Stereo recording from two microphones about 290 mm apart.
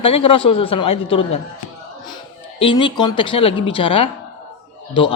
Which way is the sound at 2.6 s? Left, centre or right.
Centre.